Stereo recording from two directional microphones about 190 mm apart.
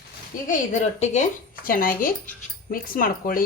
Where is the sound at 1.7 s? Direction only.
50° left (ahead or behind).